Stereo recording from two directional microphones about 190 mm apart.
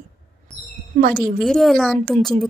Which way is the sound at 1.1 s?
Centre (ahead or behind).